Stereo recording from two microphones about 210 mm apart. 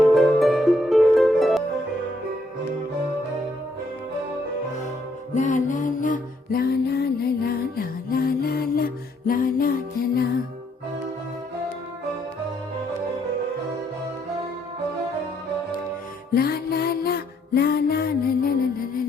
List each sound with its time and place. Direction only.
0.0 s music: centre (ahead or behind)
5.3 s music: 35° left (ahead or behind)
16.3 s music: 45° left (ahead or behind)